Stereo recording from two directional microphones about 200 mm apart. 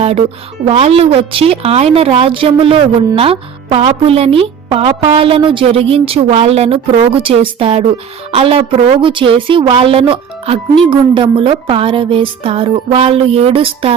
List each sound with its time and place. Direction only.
0.0 s a woman's voice: 30° right (ahead or behind)